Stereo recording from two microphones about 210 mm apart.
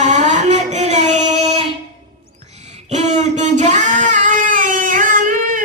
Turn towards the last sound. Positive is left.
turn(degrees=-40)  # may be behind; listen again after turning